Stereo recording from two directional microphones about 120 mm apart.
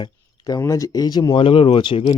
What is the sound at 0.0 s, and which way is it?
Speech, 30° left (ahead or behind).